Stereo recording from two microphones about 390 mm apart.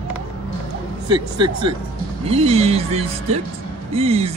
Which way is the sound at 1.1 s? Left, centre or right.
Centre.